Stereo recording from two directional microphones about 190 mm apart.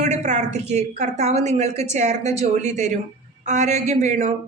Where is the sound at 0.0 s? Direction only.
40° right (ahead or behind).